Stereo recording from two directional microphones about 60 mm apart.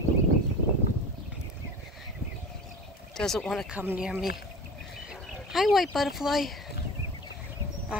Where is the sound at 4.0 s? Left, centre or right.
Centre.